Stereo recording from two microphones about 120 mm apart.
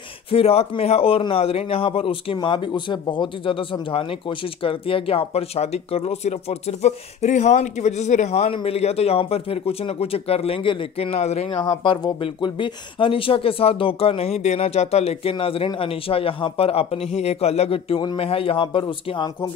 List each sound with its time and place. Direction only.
0.3 s speech: 55° left (ahead or behind)
11.5 s speech: 35° left (ahead or behind)